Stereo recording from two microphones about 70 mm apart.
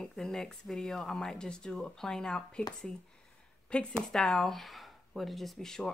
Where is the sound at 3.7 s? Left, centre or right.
Centre.